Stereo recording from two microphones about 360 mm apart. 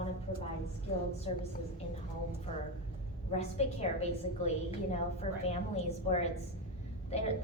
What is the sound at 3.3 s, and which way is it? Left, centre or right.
Speech, centre.